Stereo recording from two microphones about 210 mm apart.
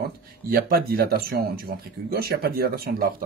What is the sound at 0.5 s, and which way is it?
Speech, 45° right (ahead or behind).